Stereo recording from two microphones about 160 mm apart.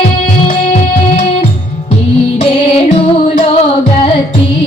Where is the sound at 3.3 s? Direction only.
40° left (ahead or behind).